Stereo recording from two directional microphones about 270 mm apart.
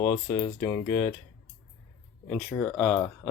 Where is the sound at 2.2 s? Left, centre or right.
Centre.